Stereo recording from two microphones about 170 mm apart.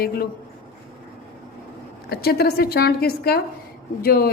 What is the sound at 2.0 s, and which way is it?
A woman's voice, 65° left (ahead or behind).